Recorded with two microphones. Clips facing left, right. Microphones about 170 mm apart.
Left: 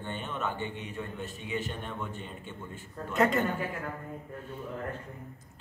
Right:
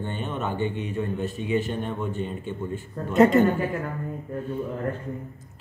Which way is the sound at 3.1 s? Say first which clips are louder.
Right 9 dB; 25° right (ahead or behind).